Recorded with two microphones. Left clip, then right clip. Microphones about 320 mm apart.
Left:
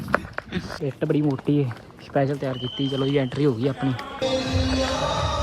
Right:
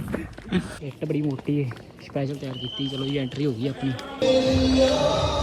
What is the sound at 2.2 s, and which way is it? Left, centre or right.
Speech, centre.